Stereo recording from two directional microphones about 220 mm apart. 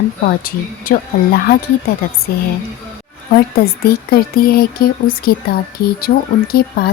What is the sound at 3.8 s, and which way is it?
Speech, 45° left (ahead or behind).